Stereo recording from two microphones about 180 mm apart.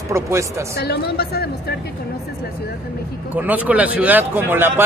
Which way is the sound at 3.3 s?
10° right (ahead or behind).